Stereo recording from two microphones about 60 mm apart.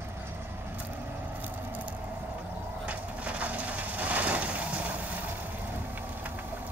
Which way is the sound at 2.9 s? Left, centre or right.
Right.